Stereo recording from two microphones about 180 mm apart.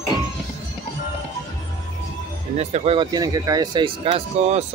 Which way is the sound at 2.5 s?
35° right (ahead or behind).